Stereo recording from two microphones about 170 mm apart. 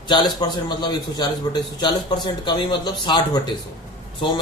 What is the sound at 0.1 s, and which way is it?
A man's voice, 25° left (ahead or behind).